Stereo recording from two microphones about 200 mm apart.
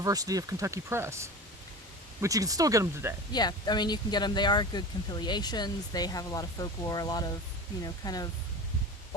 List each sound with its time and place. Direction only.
0.0 s speech: 15° right (ahead or behind)
3.3 s speech: 20° left (ahead or behind)